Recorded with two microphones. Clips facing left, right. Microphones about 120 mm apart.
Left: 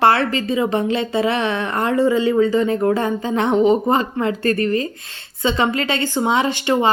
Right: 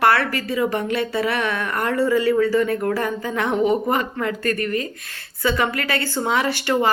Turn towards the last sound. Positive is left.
turn(degrees=20)  # may be behind; listen again after turning